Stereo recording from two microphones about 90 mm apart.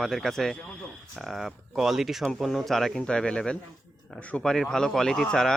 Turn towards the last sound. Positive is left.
turn(degrees=5)  # may be behind; listen again after turning